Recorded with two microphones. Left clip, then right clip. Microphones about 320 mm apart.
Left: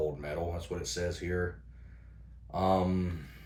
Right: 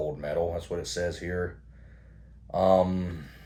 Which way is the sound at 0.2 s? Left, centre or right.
Left.